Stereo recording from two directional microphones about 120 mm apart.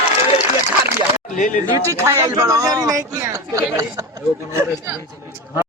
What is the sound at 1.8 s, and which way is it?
A man's voice, 25° right (ahead or behind).